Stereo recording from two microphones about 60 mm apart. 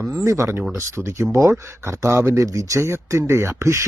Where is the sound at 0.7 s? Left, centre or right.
Right.